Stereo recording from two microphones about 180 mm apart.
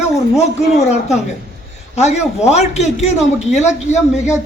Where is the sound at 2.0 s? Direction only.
40° left (ahead or behind).